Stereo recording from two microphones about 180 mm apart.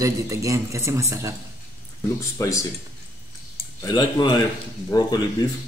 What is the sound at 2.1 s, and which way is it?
Speech, 15° left (ahead or behind).